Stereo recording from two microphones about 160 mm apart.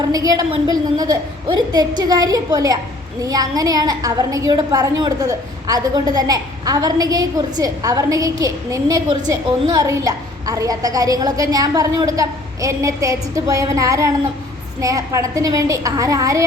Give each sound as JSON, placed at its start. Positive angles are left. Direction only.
{"t": 0.0, "sound": "a woman's voice", "side_deg": -20}